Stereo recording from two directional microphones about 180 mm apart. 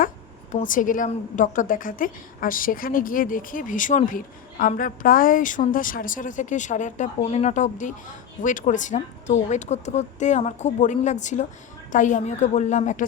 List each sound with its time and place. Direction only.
0.5 s a woman's voice: 45° left (ahead or behind)